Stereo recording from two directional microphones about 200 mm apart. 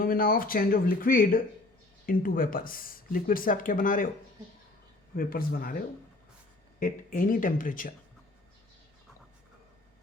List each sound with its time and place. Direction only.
0.0 s speech: 45° left (ahead or behind)
5.1 s speech: 45° left (ahead or behind)
6.7 s speech: 45° left (ahead or behind)